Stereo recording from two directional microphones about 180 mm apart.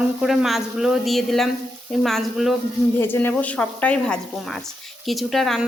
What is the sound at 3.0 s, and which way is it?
A woman's voice, 10° left (ahead or behind).